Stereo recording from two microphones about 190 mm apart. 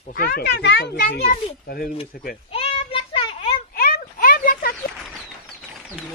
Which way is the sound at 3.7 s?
50° left (ahead or behind).